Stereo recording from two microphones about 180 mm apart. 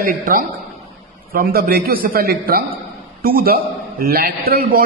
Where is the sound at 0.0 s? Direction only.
50° right (ahead or behind).